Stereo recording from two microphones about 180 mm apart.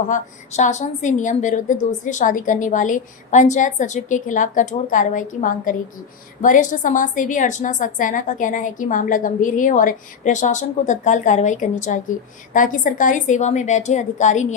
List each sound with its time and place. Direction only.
0.1 s a woman's voice: 40° left (ahead or behind)